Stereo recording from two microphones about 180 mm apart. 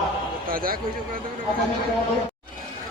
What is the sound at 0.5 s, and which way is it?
Speech, 55° right (ahead or behind).